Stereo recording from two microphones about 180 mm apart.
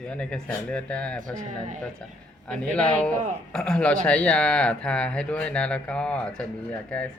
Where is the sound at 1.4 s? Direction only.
45° right (ahead or behind).